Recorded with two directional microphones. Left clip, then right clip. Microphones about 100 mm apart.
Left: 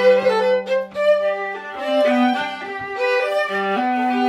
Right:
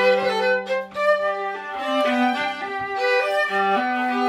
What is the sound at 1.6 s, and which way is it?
Violin, 35° right (ahead or behind).